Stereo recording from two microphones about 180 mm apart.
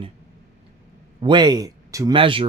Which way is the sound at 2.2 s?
30° right (ahead or behind).